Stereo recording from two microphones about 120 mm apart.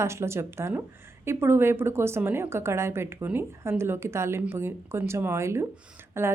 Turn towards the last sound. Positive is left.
turn(degrees=-20)  # may be behind; listen again after turning